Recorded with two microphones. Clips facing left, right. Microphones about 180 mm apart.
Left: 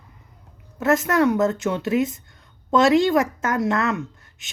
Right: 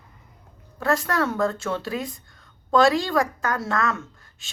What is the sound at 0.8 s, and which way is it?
Speech, 20° left (ahead or behind).